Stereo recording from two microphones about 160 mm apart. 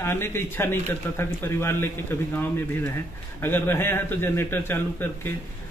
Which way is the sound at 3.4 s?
15° left (ahead or behind).